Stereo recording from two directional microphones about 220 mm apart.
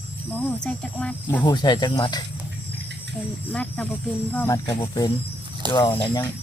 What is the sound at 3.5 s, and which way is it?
Speech, 5° left (ahead or behind).